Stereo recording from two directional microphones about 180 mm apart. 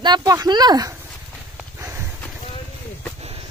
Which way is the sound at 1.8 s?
15° right (ahead or behind).